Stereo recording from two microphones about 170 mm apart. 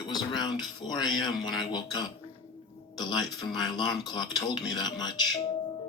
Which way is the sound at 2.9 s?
25° left (ahead or behind).